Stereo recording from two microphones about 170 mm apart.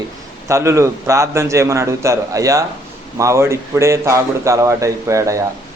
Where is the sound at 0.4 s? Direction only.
15° right (ahead or behind).